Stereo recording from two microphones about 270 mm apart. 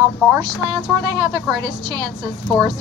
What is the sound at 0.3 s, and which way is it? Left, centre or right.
Speech, centre.